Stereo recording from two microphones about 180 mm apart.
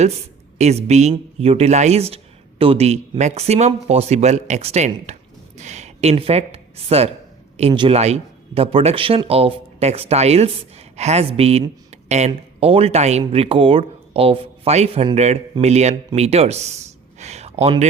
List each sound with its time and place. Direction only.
0.6 s a man's voice: 35° right (ahead or behind)